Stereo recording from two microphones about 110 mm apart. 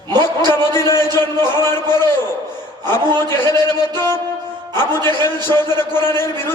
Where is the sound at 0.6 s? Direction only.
20° left (ahead or behind).